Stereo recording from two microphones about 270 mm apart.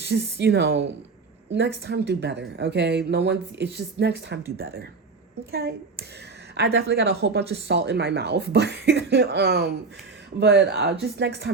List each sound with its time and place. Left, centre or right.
0.0 s speech: right